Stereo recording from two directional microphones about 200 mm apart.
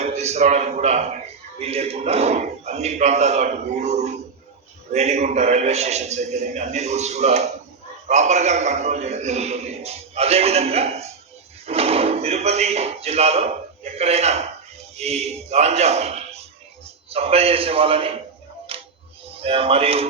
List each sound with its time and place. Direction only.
0.0 s a man's voice: 35° right (ahead or behind)
18.7 s music: 30° right (ahead or behind)
19.4 s a man's voice: 30° right (ahead or behind)